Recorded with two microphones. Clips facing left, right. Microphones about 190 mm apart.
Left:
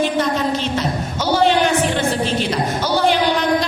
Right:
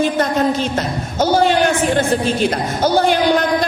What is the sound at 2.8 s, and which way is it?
Speech, 50° right (ahead or behind).